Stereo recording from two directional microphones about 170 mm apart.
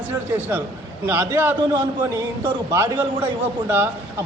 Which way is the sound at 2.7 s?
15° right (ahead or behind).